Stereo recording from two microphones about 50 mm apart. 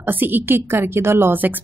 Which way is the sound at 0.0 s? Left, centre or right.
Right.